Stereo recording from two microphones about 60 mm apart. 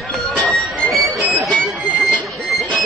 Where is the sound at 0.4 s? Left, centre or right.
Centre.